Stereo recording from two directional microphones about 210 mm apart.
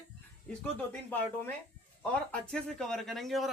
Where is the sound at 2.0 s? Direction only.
5° left (ahead or behind).